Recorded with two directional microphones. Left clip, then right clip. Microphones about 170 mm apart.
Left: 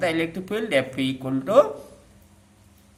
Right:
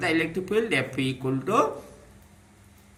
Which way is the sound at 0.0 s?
65° left (ahead or behind).